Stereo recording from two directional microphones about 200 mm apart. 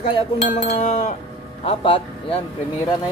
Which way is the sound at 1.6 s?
30° left (ahead or behind).